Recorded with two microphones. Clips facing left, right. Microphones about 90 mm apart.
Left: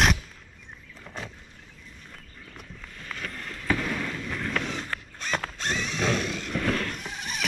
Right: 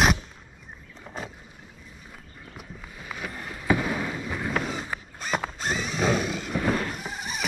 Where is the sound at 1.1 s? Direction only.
20° right (ahead or behind).